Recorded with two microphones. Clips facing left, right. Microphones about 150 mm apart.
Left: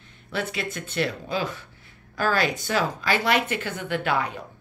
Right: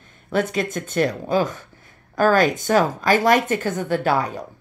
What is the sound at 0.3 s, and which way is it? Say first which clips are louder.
A woman's voice: right 8 dB; 45° right (ahead or behind).